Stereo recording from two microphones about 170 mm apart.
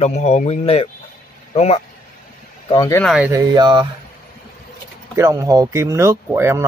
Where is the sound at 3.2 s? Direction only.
20° right (ahead or behind).